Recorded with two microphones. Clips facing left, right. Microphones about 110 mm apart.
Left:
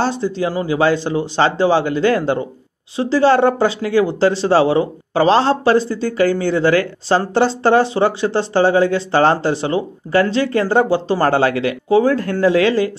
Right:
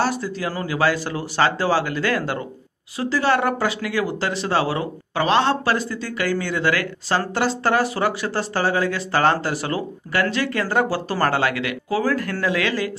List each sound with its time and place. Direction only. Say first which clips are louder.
0.0 s speech: left 5 dB; 25° left (ahead or behind)